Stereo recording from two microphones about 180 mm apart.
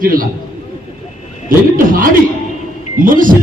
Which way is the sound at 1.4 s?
50° right (ahead or behind).